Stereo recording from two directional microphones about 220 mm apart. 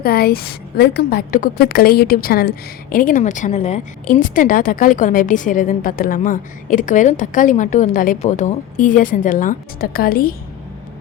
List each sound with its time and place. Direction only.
0.0 s a woman's voice: 45° left (ahead or behind)